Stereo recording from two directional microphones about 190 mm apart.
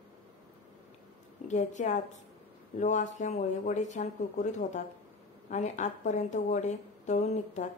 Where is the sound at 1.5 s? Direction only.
40° left (ahead or behind).